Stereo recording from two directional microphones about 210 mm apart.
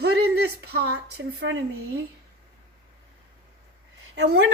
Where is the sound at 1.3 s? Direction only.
50° right (ahead or behind).